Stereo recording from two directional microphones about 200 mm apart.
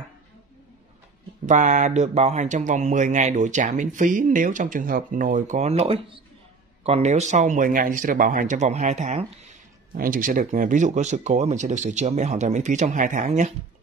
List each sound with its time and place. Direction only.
1.4 s speech: 40° right (ahead or behind)